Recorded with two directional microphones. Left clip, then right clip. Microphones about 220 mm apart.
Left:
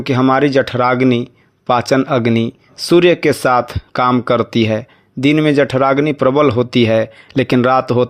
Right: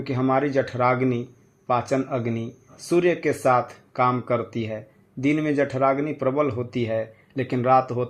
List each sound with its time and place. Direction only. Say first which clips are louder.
0.0 s speech: left 10 dB; 40° left (ahead or behind)